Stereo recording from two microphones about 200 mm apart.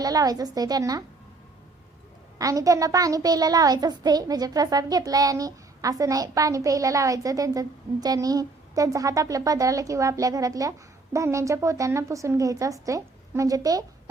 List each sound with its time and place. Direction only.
0.0 s a woman's voice: 20° right (ahead or behind)
2.4 s a child's voice: 15° right (ahead or behind)